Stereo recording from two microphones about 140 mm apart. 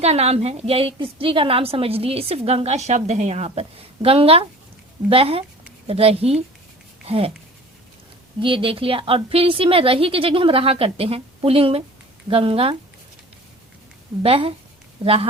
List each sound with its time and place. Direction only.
0.0 s a woman's voice: 50° right (ahead or behind)
8.4 s a woman's voice: 40° right (ahead or behind)
14.2 s a woman's voice: 40° right (ahead or behind)